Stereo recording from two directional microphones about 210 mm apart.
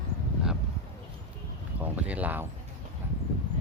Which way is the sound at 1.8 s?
5° right (ahead or behind).